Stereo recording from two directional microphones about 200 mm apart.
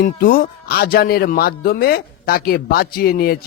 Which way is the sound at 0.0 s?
45° left (ahead or behind).